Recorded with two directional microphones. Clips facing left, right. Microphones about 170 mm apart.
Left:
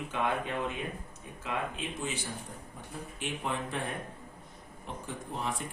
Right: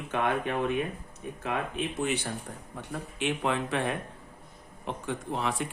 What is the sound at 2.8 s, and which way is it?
Speech, 80° right.